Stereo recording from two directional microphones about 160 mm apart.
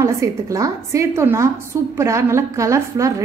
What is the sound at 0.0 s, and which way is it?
A woman's voice, 20° right (ahead or behind).